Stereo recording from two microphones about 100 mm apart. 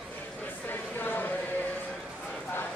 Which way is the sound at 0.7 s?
20° left (ahead or behind).